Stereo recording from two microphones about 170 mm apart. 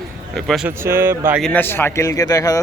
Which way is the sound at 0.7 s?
15° right (ahead or behind).